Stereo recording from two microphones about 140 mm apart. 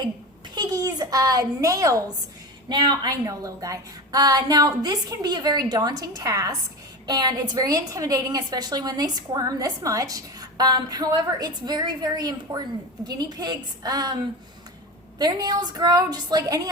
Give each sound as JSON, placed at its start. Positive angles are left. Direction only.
{"t": 0.5, "sound": "a sound", "side_deg": -30}
{"t": 2.6, "sound": "a woman's voice", "side_deg": -30}
{"t": 15.2, "sound": "a woman's voice", "side_deg": -30}